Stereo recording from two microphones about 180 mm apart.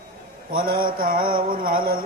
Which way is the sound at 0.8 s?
50° right (ahead or behind).